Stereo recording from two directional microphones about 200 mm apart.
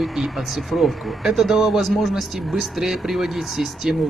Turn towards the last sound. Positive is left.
turn(degrees=0)  # may be behind; listen again after turning